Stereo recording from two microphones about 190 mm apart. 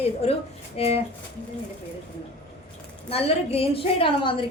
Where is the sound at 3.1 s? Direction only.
30° left (ahead or behind).